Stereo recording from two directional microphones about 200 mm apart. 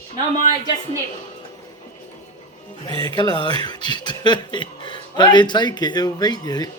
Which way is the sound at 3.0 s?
20° left (ahead or behind).